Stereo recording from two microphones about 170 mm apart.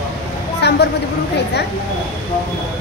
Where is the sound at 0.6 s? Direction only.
80° left.